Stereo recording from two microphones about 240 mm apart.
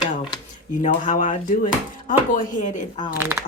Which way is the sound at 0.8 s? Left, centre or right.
Left.